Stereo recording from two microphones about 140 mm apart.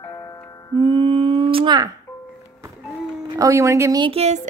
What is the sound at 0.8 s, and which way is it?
Humming, 35° right (ahead or behind).